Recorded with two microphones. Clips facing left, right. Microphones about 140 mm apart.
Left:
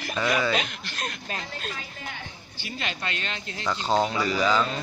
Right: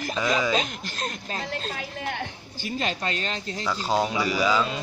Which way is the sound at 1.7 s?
65° right (ahead or behind).